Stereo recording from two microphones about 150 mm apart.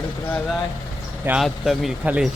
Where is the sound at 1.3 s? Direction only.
Centre (ahead or behind).